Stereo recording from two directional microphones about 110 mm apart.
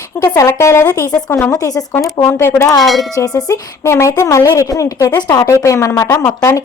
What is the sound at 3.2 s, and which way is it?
A woman's voice, 30° left (ahead or behind).